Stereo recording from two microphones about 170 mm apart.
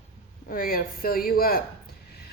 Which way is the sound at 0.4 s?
55° left (ahead or behind).